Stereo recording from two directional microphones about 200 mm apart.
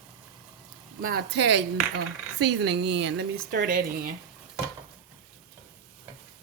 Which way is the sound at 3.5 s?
45° right (ahead or behind).